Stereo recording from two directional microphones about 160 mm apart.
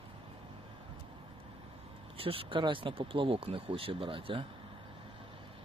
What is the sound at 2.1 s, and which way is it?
Speech, 35° right (ahead or behind).